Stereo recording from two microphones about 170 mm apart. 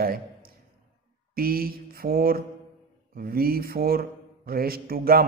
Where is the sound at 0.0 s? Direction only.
60° right (ahead or behind).